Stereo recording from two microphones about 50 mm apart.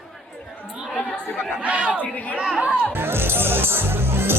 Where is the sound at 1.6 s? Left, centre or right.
Right.